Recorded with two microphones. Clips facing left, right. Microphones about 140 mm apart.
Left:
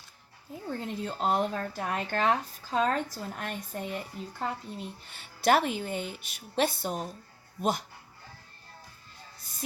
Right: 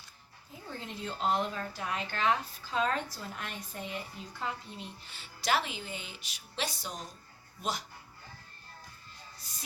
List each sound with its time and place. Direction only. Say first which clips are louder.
0.7 s speech: left 6 dB; 45° left (ahead or behind)
9.5 s music: even; 50° left (ahead or behind)